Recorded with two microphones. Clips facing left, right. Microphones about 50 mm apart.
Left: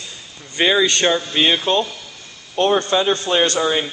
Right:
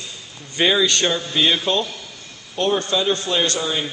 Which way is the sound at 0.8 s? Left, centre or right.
Left.